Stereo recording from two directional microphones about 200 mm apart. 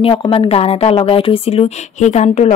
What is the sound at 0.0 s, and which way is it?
Speech, 25° left (ahead or behind).